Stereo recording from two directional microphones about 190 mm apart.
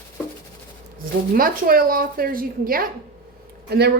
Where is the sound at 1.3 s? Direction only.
50° right (ahead or behind).